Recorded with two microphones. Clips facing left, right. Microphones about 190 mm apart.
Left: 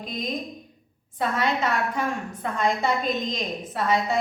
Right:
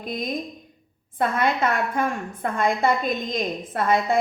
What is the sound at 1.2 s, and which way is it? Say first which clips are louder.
A woman's voice: right 3 dB; 50° right (ahead or behind).